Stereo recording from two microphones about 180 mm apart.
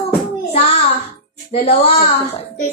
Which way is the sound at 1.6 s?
35° left (ahead or behind).